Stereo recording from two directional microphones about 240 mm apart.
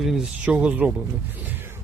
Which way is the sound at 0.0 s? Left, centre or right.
Centre.